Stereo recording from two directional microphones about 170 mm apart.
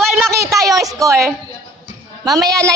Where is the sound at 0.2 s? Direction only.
15° right (ahead or behind).